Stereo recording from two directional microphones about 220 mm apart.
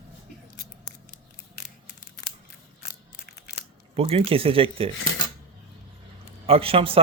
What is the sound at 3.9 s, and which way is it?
Speech, 25° right (ahead or behind).